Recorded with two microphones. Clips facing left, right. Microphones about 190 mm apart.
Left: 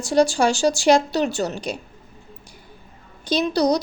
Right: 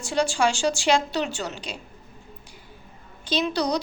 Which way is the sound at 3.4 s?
40° left (ahead or behind).